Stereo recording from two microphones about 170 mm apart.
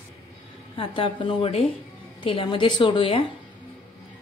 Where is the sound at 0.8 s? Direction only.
30° left (ahead or behind).